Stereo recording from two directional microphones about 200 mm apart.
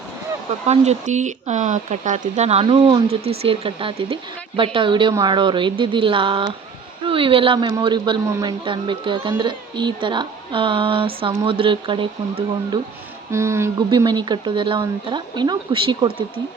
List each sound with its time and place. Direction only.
0.7 s speech: 35° right (ahead or behind)
13.3 s speech: 15° right (ahead or behind)